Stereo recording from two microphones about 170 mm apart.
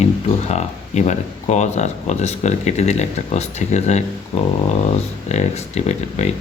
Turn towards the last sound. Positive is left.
turn(degrees=40)  # may be behind; listen again after turning